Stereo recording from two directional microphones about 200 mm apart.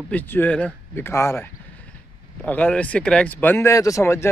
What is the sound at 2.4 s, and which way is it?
Speech, 10° left (ahead or behind).